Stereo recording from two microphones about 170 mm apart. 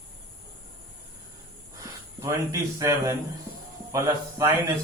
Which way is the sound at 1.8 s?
20° right (ahead or behind).